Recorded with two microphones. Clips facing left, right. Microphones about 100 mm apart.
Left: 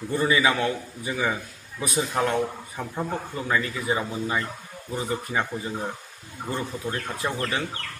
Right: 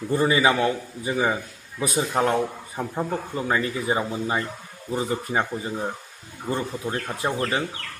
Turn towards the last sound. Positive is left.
turn(degrees=-25)  # may be behind; listen again after turning